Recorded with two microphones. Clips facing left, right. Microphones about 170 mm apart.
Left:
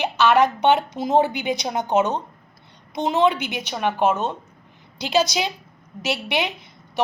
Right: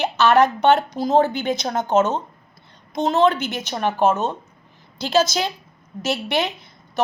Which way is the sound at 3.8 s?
40° right (ahead or behind).